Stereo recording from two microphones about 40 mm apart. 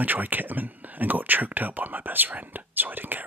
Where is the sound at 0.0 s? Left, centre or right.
Right.